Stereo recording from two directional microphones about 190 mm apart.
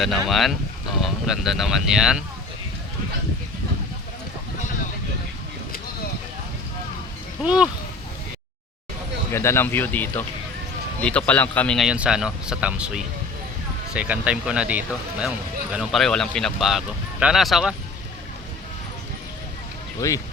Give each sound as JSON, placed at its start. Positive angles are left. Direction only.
{"t": 0.0, "sound": "speech", "side_deg": 0}
{"t": 7.4, "sound": "speech", "side_deg": -5}
{"t": 9.3, "sound": "speech", "side_deg": 15}
{"t": 20.0, "sound": "speech", "side_deg": 15}